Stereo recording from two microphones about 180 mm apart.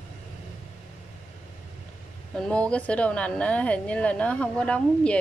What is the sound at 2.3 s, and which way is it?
A woman's voice, 5° left (ahead or behind).